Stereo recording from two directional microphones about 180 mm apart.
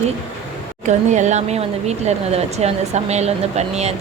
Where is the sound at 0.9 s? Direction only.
40° right (ahead or behind).